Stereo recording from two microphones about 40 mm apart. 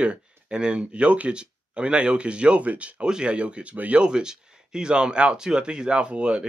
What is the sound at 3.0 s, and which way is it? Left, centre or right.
Speech, right.